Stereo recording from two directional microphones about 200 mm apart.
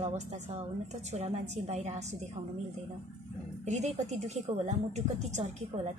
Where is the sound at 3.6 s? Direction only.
35° right (ahead or behind).